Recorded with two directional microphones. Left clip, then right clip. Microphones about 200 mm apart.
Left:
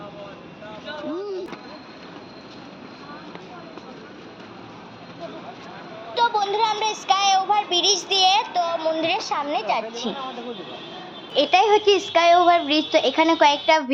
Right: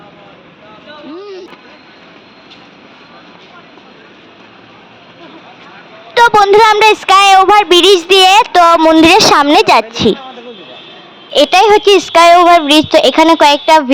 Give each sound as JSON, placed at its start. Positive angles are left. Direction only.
{"t": 6.1, "sound": "a woman's voice", "side_deg": -55}
{"t": 11.3, "sound": "a woman's voice", "side_deg": -50}